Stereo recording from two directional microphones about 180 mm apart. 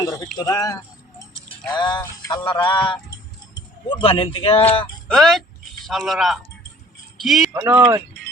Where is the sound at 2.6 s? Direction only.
25° left (ahead or behind).